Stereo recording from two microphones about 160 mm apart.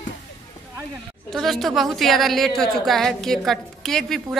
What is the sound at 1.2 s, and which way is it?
A woman's voice, centre (ahead or behind).